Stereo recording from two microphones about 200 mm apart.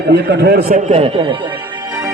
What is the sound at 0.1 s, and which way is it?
Speech, 55° right (ahead or behind).